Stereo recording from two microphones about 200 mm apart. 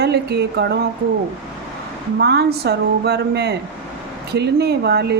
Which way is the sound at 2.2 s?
55° right (ahead or behind).